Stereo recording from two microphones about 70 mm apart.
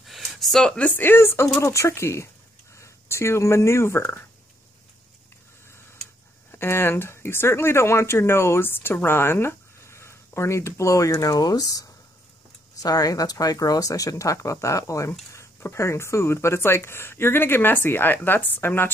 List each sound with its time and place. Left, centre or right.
0.0 s a sound: centre
0.8 s speech: left
6.5 s speech: left